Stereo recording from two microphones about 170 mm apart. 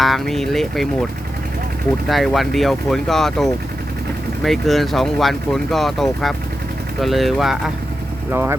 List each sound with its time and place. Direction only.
0.0 s speech: centre (ahead or behind)
2.0 s speech: centre (ahead or behind)
8.3 s speech: 15° right (ahead or behind)